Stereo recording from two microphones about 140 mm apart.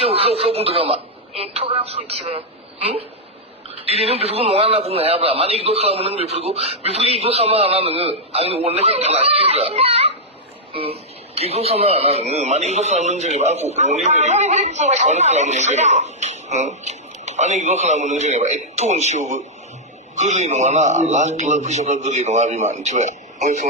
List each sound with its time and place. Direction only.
0.0 s a man's voice: 45° right (ahead or behind)
3.8 s a man's voice: 45° right (ahead or behind)
11.3 s a man's voice: 45° right (ahead or behind)